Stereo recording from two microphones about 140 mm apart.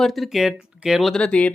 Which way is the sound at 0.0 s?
Centre (ahead or behind).